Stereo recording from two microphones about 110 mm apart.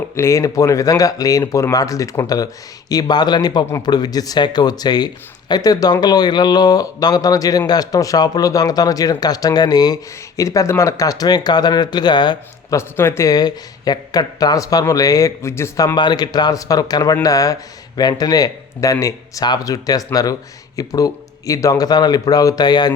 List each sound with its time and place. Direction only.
0.2 s speech: 30° left (ahead or behind)
12.7 s speech: 25° left (ahead or behind)
16.0 s speech: 40° left (ahead or behind)